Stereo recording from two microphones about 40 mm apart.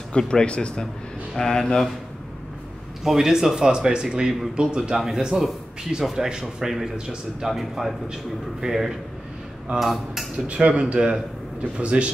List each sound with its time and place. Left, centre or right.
0.2 s speech: left
3.0 s a man's voice: centre
4.9 s a man's voice: centre
10.3 s speech: right